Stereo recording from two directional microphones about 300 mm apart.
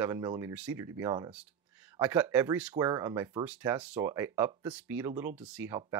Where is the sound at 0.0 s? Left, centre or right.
Centre.